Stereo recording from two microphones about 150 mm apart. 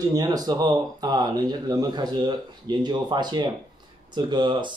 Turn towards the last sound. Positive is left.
turn(degrees=-30)  # may be behind; listen again after turning